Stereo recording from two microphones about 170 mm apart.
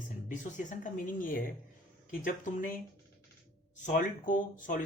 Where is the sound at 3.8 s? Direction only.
50° left (ahead or behind).